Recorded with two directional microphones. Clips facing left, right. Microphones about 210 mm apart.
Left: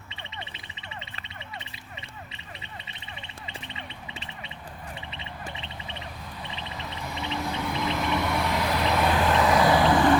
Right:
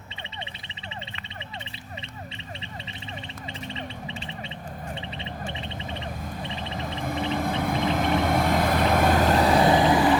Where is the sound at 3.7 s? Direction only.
35° right (ahead or behind).